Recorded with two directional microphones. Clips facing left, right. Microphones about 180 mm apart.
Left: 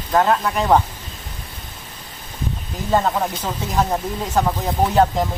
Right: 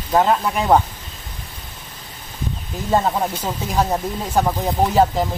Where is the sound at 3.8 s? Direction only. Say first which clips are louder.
Even; 10° right (ahead or behind).